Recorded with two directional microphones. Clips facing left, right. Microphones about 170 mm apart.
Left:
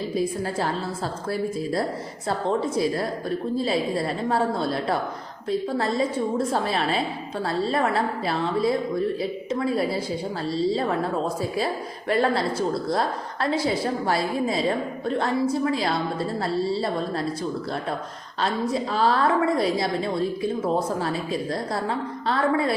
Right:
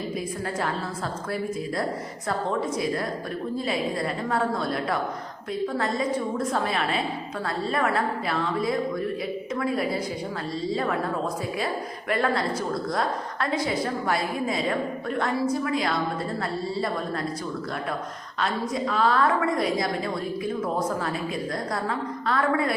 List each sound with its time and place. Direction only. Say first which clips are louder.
2.5 s a woman's voice: left 5 dB; 30° left (ahead or behind)
18.3 s a woman's voice: left 3 dB; 30° left (ahead or behind)